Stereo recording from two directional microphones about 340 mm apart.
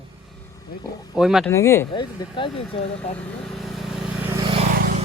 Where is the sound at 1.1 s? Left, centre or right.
Centre.